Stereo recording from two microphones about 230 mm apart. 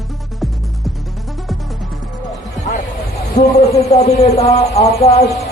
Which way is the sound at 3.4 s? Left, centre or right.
Left.